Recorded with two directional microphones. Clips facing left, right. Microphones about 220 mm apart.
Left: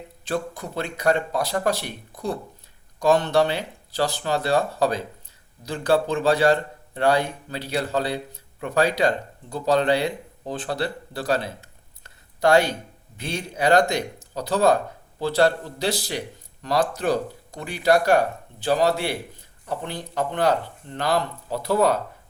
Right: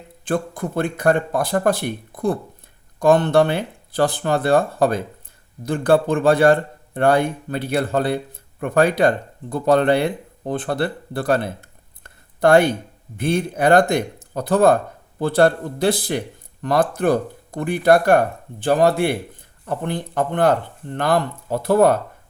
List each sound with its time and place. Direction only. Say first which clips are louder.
0.3 s a man's voice: right 5 dB; 50° right (ahead or behind)